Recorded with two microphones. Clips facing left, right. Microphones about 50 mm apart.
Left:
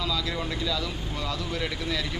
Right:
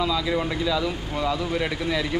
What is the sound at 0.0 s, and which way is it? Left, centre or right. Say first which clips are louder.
Speech: right 6 dB; centre.